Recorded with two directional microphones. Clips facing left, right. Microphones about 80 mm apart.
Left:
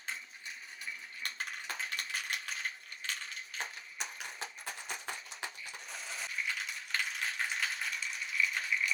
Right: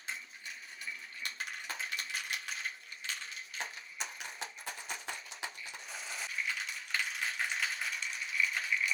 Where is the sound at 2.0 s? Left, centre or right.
Left.